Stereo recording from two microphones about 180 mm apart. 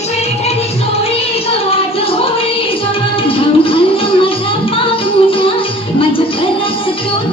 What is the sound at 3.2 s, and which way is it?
Music, 30° left (ahead or behind).